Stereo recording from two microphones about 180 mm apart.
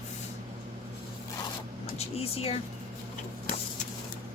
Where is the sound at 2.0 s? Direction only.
35° left (ahead or behind).